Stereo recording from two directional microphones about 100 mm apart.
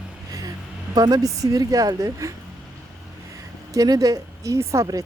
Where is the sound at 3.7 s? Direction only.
40° right (ahead or behind).